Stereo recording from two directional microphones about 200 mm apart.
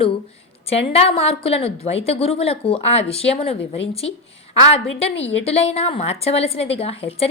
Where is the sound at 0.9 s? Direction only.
30° left (ahead or behind).